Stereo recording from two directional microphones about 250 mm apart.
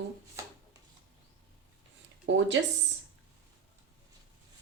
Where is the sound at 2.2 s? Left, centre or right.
Right.